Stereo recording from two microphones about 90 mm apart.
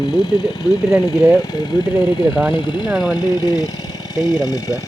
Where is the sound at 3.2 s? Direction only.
45° left (ahead or behind).